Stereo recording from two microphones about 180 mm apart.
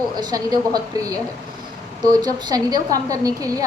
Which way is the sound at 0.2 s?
20° right (ahead or behind).